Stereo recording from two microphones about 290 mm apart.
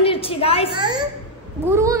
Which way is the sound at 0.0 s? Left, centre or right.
Centre.